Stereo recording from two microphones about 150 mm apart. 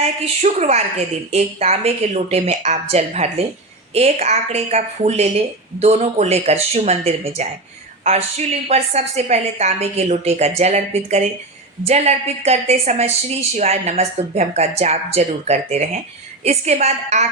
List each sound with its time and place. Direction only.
0.0 s a woman's voice: 50° right (ahead or behind)
8.6 s a woman's voice: 45° right (ahead or behind)